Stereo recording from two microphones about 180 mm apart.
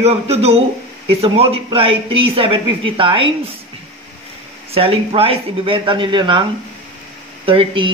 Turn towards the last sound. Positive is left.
turn(degrees=-30)  # may be behind; listen again after turning